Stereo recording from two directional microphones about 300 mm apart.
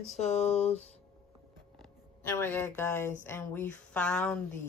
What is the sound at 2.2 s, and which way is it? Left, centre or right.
Speech, centre.